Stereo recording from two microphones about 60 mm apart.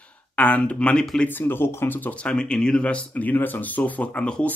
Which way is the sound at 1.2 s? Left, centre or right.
Left.